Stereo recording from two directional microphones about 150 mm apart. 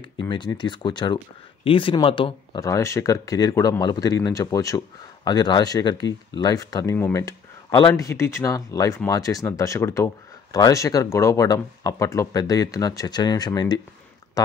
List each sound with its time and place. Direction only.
0.2 s speech: 30° left (ahead or behind)
2.6 s speech: 20° left (ahead or behind)